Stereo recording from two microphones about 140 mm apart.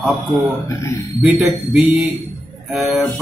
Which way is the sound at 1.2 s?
Centre (ahead or behind).